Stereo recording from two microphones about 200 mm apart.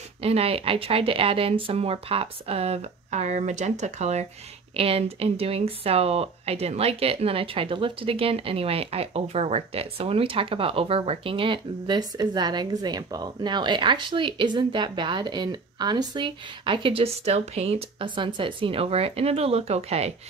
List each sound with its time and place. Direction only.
0.2 s speech: 30° right (ahead or behind)